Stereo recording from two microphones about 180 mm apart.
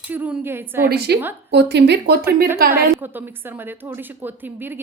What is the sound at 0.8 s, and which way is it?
A woman's voice, 60° right (ahead or behind).